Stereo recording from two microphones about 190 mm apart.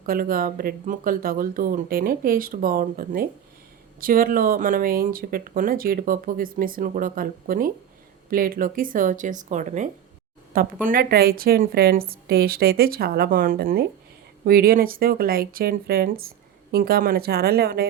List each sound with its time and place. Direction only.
0.0 s speech: 50° right (ahead or behind)